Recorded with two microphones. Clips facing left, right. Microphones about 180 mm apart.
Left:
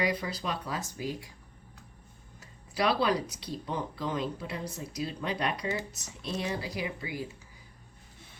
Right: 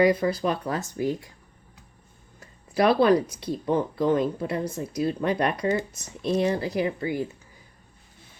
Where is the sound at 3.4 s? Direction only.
50° right (ahead or behind).